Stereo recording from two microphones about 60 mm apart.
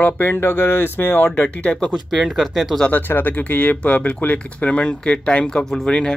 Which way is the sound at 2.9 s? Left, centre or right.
Left.